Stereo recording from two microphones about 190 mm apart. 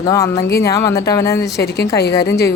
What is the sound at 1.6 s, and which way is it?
Speech, 60° left (ahead or behind).